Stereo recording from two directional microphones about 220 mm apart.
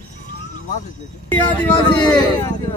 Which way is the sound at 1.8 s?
20° left (ahead or behind).